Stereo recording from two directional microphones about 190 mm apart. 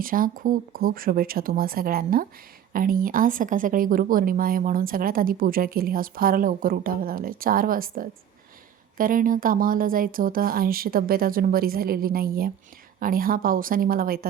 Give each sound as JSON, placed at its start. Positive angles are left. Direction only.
{"t": 0.0, "sound": "speech", "side_deg": -45}